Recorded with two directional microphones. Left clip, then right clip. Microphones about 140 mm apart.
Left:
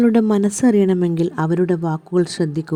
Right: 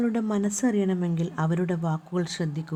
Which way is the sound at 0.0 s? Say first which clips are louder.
Left 11 dB; 45° left (ahead or behind).